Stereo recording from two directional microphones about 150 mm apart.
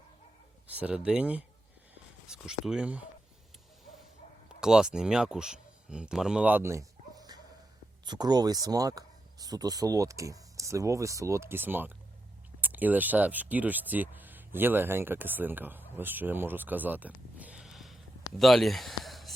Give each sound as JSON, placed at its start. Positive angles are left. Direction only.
{"t": 0.8, "sound": "speech", "side_deg": -5}
{"t": 4.4, "sound": "speech", "side_deg": -5}
{"t": 16.0, "sound": "a sound", "side_deg": -15}